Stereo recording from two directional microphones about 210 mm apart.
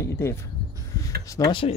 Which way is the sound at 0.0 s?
10° left (ahead or behind).